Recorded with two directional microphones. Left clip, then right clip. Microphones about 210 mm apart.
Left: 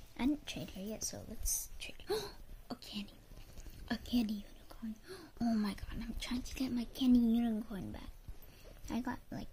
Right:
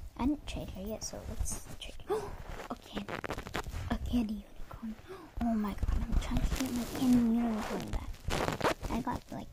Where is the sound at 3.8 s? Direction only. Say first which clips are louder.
Left 1 dB; 20° left (ahead or behind).